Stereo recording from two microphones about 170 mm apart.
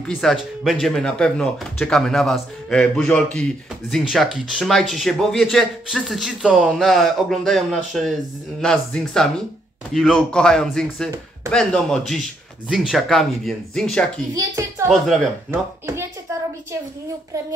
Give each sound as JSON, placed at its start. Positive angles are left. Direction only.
{"t": 0.1, "sound": "speech", "side_deg": 0}
{"t": 14.3, "sound": "a woman's voice", "side_deg": -15}
{"t": 14.9, "sound": "speech", "side_deg": 0}